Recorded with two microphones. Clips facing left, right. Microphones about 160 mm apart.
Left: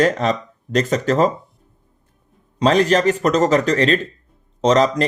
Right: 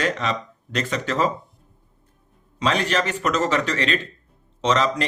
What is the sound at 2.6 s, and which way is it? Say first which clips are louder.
Speech: left 7 dB; 40° left (ahead or behind).